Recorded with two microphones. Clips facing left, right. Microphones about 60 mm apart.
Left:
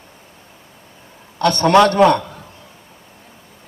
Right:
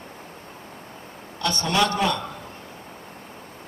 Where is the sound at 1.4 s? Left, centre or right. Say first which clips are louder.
Left 11 dB; left.